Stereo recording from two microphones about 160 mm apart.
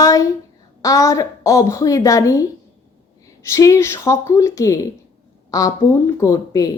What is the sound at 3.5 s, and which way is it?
Child singing, 20° left (ahead or behind).